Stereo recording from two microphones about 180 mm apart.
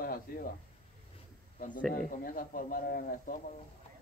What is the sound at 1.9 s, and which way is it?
Speech, 50° left (ahead or behind).